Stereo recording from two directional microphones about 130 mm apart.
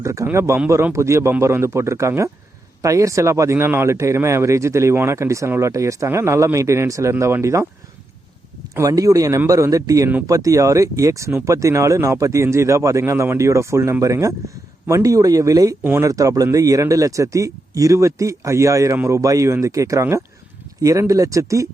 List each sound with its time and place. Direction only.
0.0 s speech: 20° right (ahead or behind)
8.7 s speech: 25° right (ahead or behind)
15.8 s speech: 15° right (ahead or behind)
16.0 s speech: 25° right (ahead or behind)